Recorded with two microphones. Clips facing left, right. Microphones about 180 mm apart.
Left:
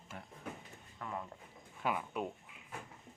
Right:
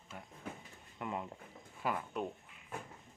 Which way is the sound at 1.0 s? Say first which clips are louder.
Right 3 dB; 20° right (ahead or behind).